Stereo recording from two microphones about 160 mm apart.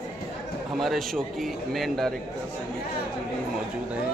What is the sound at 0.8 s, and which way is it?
A man's voice, centre (ahead or behind).